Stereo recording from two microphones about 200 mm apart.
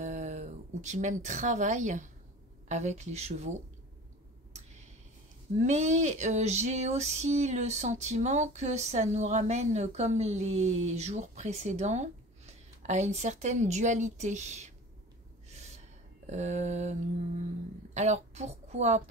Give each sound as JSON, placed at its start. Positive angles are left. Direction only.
{"t": 0.0, "sound": "speech", "side_deg": -35}
{"t": 2.7, "sound": "female singing", "side_deg": -35}
{"t": 5.6, "sound": "female singing", "side_deg": -35}
{"t": 15.5, "sound": "gasp", "side_deg": -35}
{"t": 16.3, "sound": "female singing", "side_deg": -35}
{"t": 17.9, "sound": "a woman's voice", "side_deg": -35}